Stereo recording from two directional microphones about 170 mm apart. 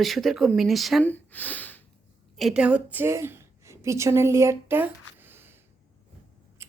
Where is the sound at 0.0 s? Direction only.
Centre (ahead or behind).